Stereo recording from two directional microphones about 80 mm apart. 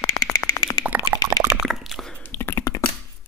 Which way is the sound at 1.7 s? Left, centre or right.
Centre.